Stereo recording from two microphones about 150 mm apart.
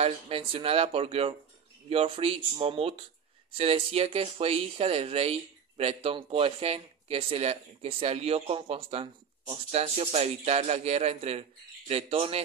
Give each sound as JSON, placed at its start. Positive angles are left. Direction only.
{"t": 0.0, "sound": "speech", "side_deg": -40}